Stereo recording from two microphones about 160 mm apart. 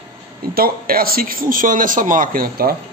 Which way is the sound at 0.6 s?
65° right (ahead or behind).